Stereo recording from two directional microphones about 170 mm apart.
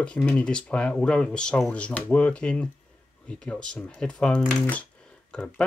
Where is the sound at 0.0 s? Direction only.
5° left (ahead or behind).